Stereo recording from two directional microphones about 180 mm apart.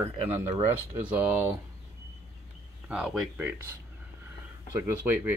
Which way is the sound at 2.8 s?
5° right (ahead or behind).